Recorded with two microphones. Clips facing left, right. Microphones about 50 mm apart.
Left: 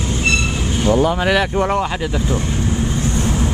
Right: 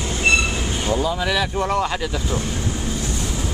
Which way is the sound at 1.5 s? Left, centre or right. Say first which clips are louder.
Left 3 dB; left.